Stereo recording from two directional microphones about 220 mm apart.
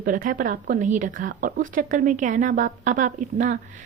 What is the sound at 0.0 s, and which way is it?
Speech, 35° right (ahead or behind).